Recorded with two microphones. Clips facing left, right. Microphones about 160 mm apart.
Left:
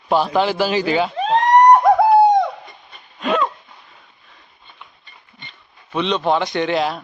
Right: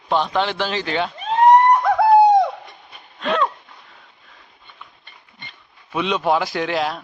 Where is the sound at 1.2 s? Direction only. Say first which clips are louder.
Right 2 dB; 90° left.